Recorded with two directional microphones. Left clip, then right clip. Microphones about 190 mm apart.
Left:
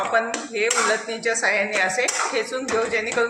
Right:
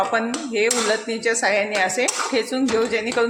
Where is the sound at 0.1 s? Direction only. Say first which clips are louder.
Even; 50° right (ahead or behind).